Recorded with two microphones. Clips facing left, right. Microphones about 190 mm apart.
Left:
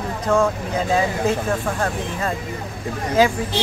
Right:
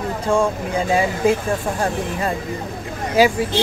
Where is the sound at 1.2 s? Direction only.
10° right (ahead or behind).